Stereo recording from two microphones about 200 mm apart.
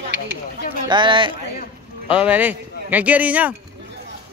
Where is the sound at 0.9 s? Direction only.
25° right (ahead or behind).